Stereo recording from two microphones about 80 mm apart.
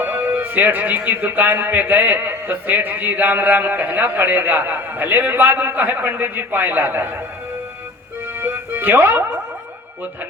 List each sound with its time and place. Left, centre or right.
0.0 s speech: centre
8.4 s music: right